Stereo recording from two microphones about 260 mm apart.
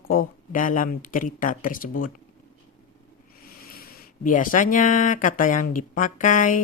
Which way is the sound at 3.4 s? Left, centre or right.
Left.